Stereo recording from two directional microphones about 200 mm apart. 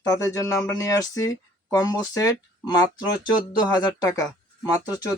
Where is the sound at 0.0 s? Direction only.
15° left (ahead or behind).